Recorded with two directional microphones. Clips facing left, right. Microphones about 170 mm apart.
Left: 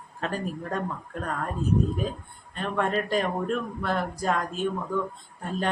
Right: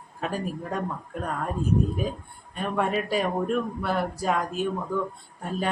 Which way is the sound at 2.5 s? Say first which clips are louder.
Right 1 dB; 10° right (ahead or behind).